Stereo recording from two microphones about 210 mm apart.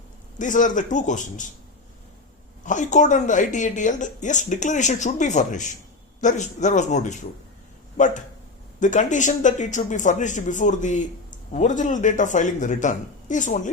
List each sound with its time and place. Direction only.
0.3 s a man's voice: 35° left (ahead or behind)
2.6 s a man's voice: 35° left (ahead or behind)